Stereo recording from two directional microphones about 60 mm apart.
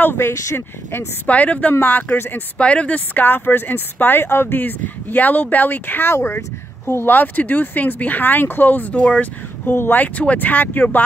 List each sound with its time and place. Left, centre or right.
0.0 s speech: left
0.3 s speech: left
1.2 s speech: left
7.1 s speech: left
9.0 s speech: centre
9.7 s speech: left